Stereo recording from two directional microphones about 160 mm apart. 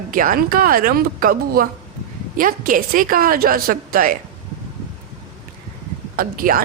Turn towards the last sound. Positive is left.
turn(degrees=-65)  # may be behind; listen again after turning